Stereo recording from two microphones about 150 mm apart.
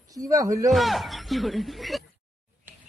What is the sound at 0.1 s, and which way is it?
Speech, 25° right (ahead or behind).